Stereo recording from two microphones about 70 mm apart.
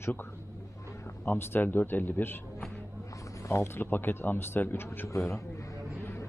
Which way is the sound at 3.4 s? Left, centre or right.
Left.